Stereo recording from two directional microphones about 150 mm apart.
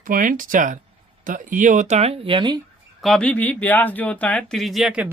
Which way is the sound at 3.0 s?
5° left (ahead or behind).